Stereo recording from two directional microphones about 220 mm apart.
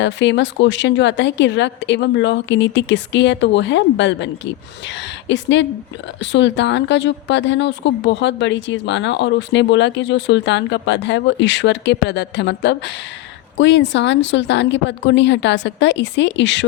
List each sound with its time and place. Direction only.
0.0 s a woman's voice: 55° left (ahead or behind)
5.3 s a woman's voice: 55° left (ahead or behind)